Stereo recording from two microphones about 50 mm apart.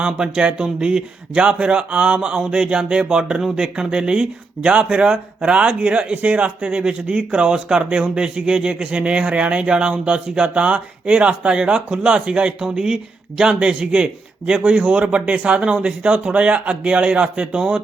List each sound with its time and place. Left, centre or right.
0.0 s speech: centre